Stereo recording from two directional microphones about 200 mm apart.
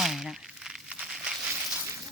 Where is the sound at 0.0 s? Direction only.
Centre (ahead or behind).